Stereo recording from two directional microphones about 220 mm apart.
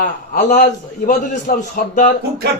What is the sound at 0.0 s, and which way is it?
A man's voice, 35° left (ahead or behind).